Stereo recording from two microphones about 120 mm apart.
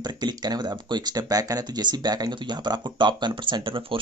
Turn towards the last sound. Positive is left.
turn(degrees=-45)  # may be behind; listen again after turning